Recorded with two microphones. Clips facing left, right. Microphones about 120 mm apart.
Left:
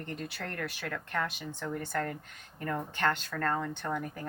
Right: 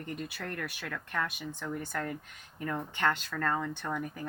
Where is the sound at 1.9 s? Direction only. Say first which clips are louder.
Left 4 dB; 50° left (ahead or behind).